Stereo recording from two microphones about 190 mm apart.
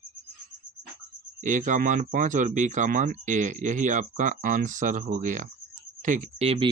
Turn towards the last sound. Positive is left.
turn(degrees=-30)  # may be behind; listen again after turning